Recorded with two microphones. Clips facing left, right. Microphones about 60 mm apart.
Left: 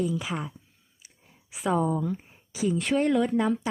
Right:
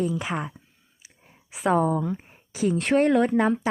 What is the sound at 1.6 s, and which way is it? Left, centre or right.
Speech, right.